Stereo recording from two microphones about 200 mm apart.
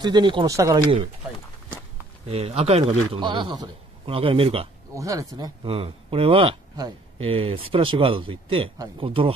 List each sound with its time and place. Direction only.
0.0 s speech: 20° right (ahead or behind)
2.2 s speech: 30° right (ahead or behind)
4.9 s speech: 15° right (ahead or behind)